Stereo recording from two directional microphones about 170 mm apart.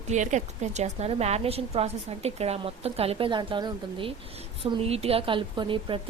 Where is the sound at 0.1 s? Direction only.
45° right (ahead or behind).